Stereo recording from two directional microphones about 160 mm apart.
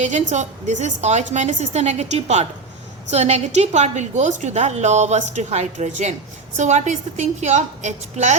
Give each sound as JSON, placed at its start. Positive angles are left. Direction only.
{"t": 0.0, "sound": "a woman's voice", "side_deg": -45}